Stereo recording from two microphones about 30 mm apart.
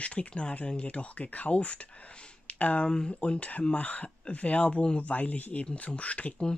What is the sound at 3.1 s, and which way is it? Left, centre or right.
Speech, left.